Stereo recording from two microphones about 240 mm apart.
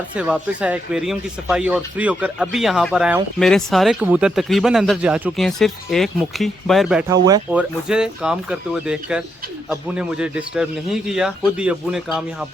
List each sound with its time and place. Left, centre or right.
0.2 s speech: centre
7.3 s speech: centre
7.9 s speech: centre